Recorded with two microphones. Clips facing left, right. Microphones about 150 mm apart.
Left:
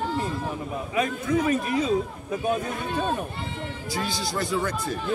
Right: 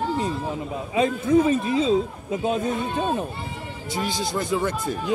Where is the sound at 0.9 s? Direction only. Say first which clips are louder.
Right 6 dB; 25° right (ahead or behind).